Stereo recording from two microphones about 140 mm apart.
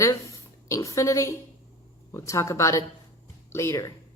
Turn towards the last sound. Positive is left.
turn(degrees=20)  # may be behind; listen again after turning